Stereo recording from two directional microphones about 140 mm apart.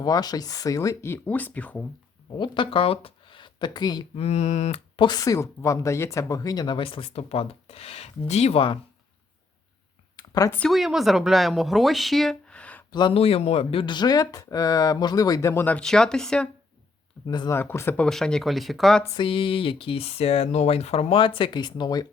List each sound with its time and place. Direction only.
0.0 s speech: 30° left (ahead or behind); by 1.9 s 10° left (ahead or behind)
2.4 s speech: 40° left (ahead or behind)
4.2 s speech: 50° left (ahead or behind)
4.9 s speech: 30° left (ahead or behind)
10.2 s a sound: 25° left (ahead or behind)
10.7 s a woman's voice: centre (ahead or behind)
12.9 s speech: 35° left (ahead or behind); by 16.5 s 5° left (ahead or behind)
17.2 s speech: 30° left (ahead or behind)
17.5 s a woman's voice: 15° left (ahead or behind)
19.1 s speech: 40° left (ahead or behind)